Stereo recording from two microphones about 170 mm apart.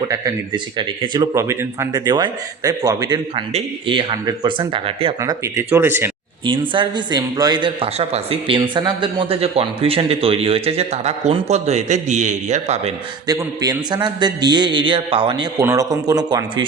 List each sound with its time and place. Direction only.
0.1 s speech: 25° right (ahead or behind)
5.2 s speech: 20° right (ahead or behind)
6.4 s a man's voice: 30° right (ahead or behind)
13.2 s speech: 20° right (ahead or behind)